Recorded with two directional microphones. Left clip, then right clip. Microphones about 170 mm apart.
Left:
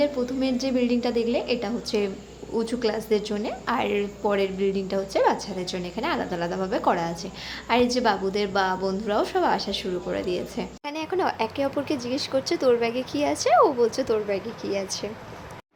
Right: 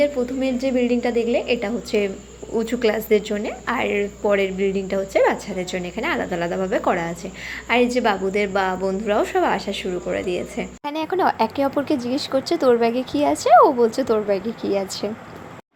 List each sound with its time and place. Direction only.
0.0 s a woman's voice: 5° right (ahead or behind)
10.8 s a woman's voice: 20° right (ahead or behind)